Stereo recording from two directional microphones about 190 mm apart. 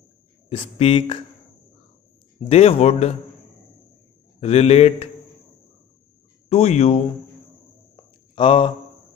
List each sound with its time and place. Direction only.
0.5 s speech: 30° left (ahead or behind)
2.4 s a man's voice: 30° left (ahead or behind)
4.4 s a man's voice: 35° left (ahead or behind)
6.5 s a man's voice: 35° left (ahead or behind)
8.4 s speech: 30° left (ahead or behind)